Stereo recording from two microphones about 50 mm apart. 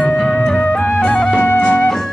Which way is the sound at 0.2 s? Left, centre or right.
Centre.